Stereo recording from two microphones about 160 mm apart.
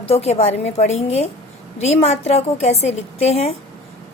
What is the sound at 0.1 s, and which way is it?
A woman's voice, 40° left (ahead or behind).